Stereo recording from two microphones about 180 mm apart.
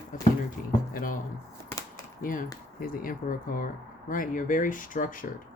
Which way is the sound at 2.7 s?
50° left (ahead or behind).